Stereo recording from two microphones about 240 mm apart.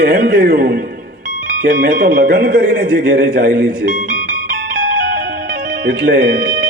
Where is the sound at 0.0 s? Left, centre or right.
Right.